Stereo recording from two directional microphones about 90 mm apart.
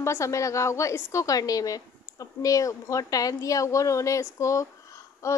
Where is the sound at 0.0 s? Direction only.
35° left (ahead or behind).